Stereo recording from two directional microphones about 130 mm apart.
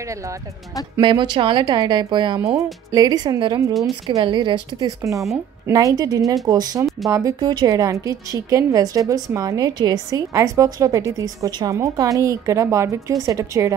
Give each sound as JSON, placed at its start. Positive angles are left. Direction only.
{"t": 1.0, "sound": "a woman's voice", "side_deg": -40}